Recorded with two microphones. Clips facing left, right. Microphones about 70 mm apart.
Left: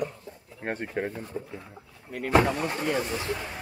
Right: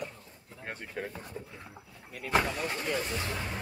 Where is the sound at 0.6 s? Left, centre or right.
Left.